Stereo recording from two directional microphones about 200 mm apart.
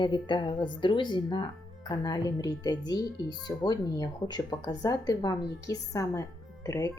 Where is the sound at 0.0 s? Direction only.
25° left (ahead or behind).